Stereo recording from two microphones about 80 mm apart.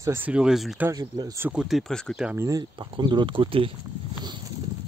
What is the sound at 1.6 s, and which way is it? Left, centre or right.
Speech, centre.